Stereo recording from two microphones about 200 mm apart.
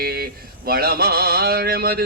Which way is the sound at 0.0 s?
50° right (ahead or behind).